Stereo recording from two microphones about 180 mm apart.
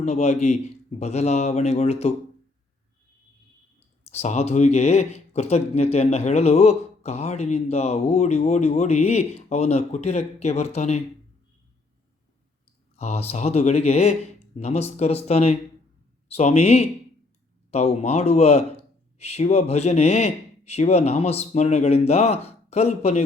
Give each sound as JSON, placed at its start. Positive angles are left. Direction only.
{"t": 0.0, "sound": "speech", "side_deg": 40}
{"t": 4.1, "sound": "speech", "side_deg": 35}
{"t": 13.0, "sound": "speech", "side_deg": 35}